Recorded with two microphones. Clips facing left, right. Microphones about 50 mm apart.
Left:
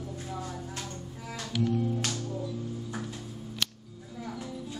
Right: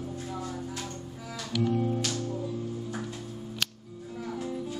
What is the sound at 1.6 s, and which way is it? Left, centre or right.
Music, right.